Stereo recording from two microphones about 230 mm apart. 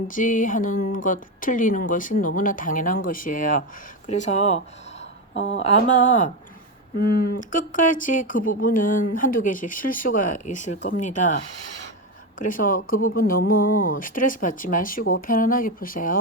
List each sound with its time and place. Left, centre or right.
0.1 s speech: left
5.3 s speech: left
5.6 s speech: left
12.4 s speech: left